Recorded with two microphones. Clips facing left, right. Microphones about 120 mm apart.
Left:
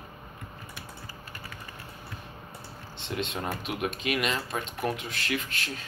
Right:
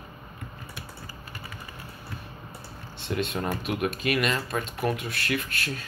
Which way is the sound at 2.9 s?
20° left (ahead or behind).